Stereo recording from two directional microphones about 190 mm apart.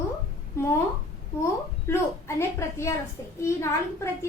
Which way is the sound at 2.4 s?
15° left (ahead or behind).